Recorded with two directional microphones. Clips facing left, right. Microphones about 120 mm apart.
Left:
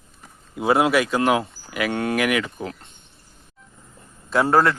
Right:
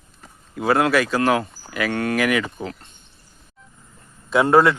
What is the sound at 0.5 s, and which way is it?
Speech, 15° left (ahead or behind).